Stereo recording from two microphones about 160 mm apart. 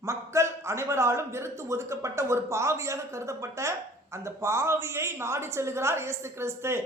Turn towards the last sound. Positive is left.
turn(degrees=-15)  # may be behind; listen again after turning